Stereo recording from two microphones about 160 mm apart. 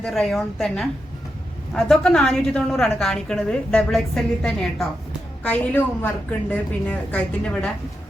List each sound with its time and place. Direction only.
0.0 s a woman's voice: centre (ahead or behind)